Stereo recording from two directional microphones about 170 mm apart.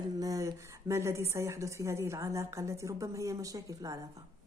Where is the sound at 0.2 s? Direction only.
20° right (ahead or behind).